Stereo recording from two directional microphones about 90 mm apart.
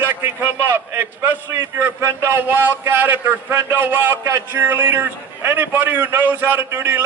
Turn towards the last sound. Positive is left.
turn(degrees=-30)  # may be behind; listen again after turning